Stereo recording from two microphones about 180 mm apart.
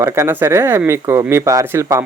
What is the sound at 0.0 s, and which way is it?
Speech, 15° right (ahead or behind).